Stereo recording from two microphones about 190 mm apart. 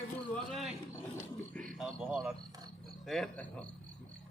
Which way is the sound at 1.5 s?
5° left (ahead or behind).